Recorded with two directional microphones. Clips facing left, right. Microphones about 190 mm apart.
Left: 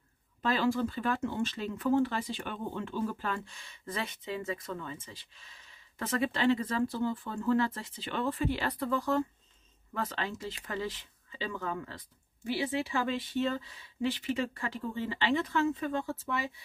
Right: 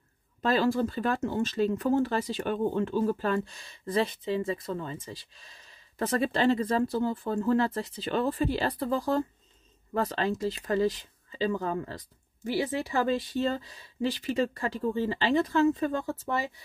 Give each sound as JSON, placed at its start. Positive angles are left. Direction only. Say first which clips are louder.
{"t": 0.4, "sound": "speech", "louder": "right 4 dB", "side_deg": -40}